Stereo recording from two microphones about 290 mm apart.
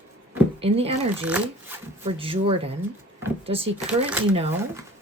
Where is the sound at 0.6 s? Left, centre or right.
Centre.